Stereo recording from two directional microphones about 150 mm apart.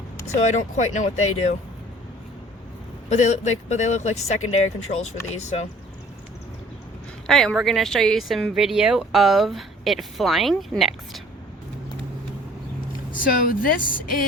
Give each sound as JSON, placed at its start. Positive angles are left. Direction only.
{"t": 0.5, "sound": "speech", "side_deg": 55}
{"t": 3.1, "sound": "speech", "side_deg": 50}
{"t": 7.3, "sound": "speech", "side_deg": 0}
{"t": 13.1, "sound": "speech", "side_deg": 65}